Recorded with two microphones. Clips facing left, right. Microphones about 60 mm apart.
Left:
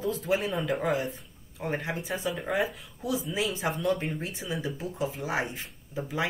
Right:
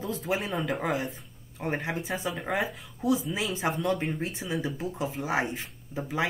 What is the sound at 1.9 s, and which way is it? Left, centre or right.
Speech, right.